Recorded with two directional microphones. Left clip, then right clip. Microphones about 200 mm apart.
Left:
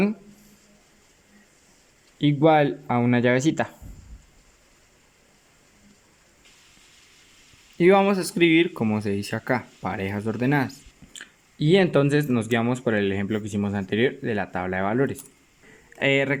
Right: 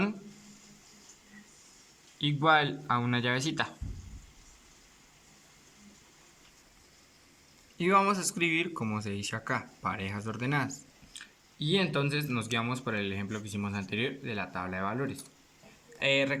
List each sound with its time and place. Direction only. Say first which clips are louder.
2.2 s speech: left 7 dB; 25° left (ahead or behind)
7.8 s speech: left 8 dB; 25° left (ahead or behind)